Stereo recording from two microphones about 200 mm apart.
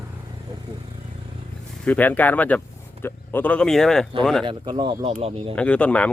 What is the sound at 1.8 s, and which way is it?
Speech, 10° left (ahead or behind).